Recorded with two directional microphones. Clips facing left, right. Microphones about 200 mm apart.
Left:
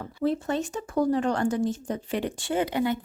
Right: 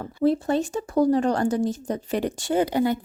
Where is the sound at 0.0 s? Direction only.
35° right (ahead or behind).